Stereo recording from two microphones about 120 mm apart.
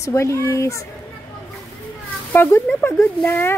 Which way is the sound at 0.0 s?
25° left (ahead or behind).